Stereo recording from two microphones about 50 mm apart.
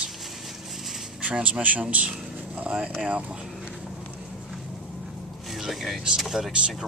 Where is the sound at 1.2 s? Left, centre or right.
Right.